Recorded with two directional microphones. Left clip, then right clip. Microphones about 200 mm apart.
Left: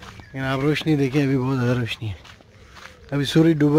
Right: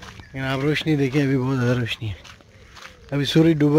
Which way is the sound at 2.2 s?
60° right (ahead or behind).